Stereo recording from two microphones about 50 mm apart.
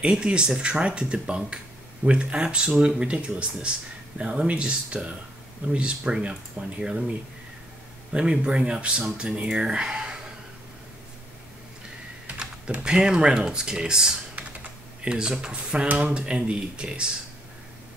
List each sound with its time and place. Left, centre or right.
0.0 s speech: centre
8.1 s speech: right
12.3 s speech: right